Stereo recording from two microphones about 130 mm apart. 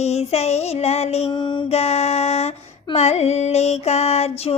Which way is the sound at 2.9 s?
55° left (ahead or behind).